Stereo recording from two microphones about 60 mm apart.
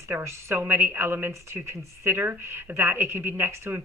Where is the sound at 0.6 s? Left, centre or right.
Right.